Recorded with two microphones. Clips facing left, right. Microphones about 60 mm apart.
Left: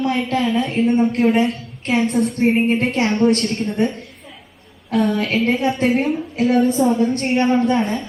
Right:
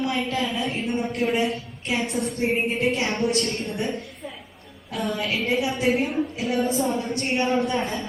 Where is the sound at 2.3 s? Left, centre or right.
Left.